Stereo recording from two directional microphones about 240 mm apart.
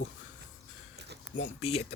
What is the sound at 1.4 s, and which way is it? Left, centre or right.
Speech, left.